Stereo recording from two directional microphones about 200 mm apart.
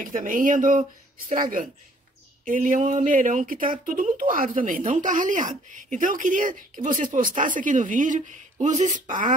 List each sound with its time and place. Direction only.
0.0 s speech: 40° right (ahead or behind)